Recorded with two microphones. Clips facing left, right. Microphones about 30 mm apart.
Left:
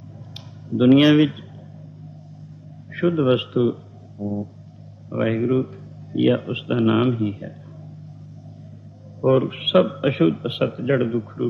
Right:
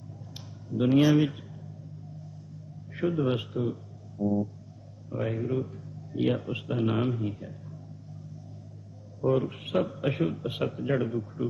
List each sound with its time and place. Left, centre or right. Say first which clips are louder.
0.3 s a sound: left 8 dB; left
0.9 s speech: left 8 dB; left
2.9 s speech: left 9 dB; left
5.2 s a man's voice: left 10 dB; left
6.7 s a man's voice: left 9 dB; left
9.2 s speech: left 8 dB; left
9.6 s a man's voice: left 11 dB; left
9.9 s a man's voice: left 10 dB; left